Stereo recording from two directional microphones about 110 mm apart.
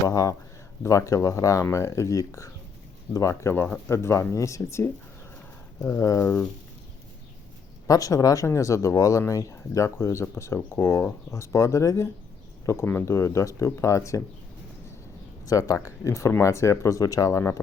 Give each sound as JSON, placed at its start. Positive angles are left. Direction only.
{"t": 0.1, "sound": "speech", "side_deg": 30}
{"t": 7.9, "sound": "speech", "side_deg": 30}
{"t": 15.4, "sound": "speech", "side_deg": 30}